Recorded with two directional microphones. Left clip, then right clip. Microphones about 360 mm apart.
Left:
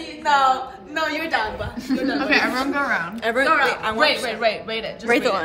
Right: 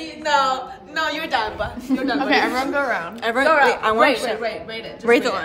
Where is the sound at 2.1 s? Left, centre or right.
Right.